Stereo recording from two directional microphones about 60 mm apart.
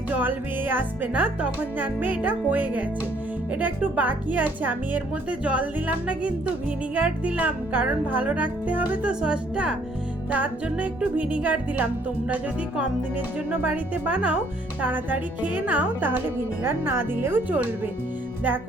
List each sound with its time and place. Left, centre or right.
0.2 s speech: right
9.2 s speech: centre
10.3 s speech: right
13.1 s speech: right